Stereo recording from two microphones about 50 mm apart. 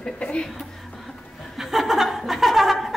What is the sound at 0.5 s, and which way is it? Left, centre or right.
Chuckle, centre.